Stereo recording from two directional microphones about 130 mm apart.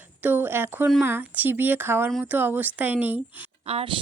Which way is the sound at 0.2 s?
15° right (ahead or behind).